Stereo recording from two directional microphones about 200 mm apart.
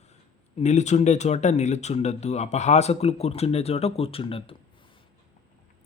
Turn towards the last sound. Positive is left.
turn(degrees=25)  # may be behind; listen again after turning